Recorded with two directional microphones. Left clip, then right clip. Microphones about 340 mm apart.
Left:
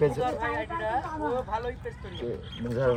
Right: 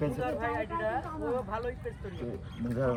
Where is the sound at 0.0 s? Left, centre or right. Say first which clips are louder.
Left 6 dB; left.